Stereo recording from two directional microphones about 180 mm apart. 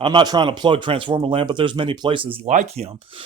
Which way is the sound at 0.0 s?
25° right (ahead or behind).